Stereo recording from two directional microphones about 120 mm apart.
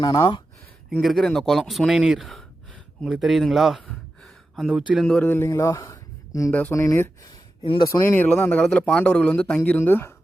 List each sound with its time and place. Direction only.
0.0 s speech: 35° left (ahead or behind)
1.0 s speech: centre (ahead or behind)
3.8 s gasp: centre (ahead or behind)
4.7 s speech: 10° right (ahead or behind)
5.0 s speech: 10° left (ahead or behind)
6.5 s speech: 15° left (ahead or behind)
7.6 s speech: 45° left (ahead or behind)
7.9 s speech: 20° left (ahead or behind)